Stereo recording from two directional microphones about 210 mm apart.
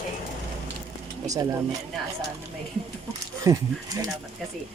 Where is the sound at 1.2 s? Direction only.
15° right (ahead or behind).